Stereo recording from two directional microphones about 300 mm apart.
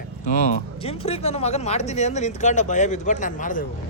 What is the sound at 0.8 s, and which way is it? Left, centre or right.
Speech, centre.